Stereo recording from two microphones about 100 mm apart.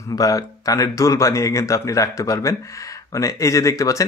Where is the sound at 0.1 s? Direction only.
35° left (ahead or behind).